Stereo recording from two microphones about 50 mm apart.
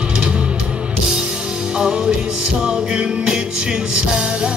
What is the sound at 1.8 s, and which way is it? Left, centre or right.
Music, centre.